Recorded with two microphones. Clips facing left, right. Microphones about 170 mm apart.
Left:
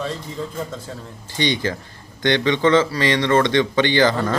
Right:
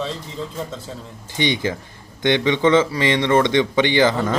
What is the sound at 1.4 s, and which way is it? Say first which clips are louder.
A man's voice: even; 20° right (ahead or behind).